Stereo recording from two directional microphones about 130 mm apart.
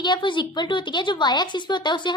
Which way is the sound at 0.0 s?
35° left (ahead or behind).